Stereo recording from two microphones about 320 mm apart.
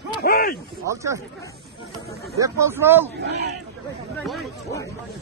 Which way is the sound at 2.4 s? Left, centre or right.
Centre.